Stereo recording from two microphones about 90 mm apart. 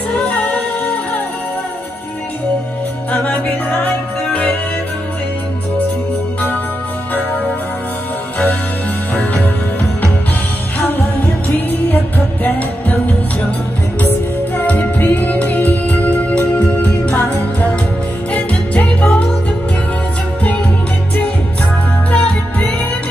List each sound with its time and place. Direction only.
0.1 s music: 10° left (ahead or behind)
3.1 s music: 15° left (ahead or behind)
9.1 s music: 20° left (ahead or behind)
10.8 s music: 20° left (ahead or behind)
14.6 s music: 20° left (ahead or behind)
22.1 s music: 10° left (ahead or behind)